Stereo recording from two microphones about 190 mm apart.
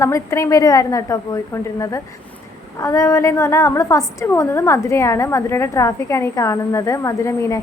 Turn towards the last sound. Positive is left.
turn(degrees=15)  # may be behind; listen again after turning